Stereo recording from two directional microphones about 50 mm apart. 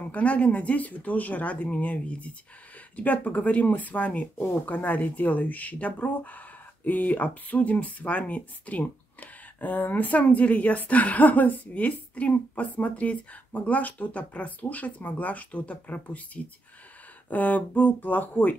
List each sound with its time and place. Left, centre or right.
0.1 s speech: left
17.3 s speech: left